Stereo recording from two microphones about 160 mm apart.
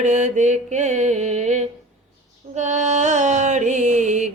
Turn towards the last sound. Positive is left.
turn(degrees=-50)  # may be behind; listen again after turning